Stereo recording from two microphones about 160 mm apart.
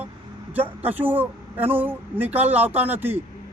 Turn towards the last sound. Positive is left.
turn(degrees=-15)  # may be behind; listen again after turning